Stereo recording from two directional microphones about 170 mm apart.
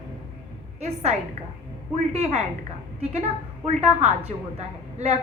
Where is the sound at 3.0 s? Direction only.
40° right (ahead or behind).